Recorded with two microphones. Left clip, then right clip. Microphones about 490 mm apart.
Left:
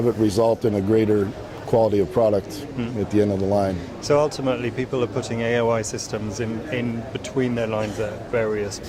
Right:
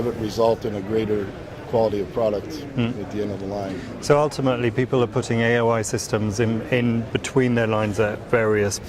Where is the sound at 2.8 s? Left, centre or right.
Right.